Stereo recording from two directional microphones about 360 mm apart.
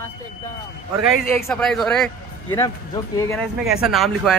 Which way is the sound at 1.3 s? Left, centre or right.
Centre.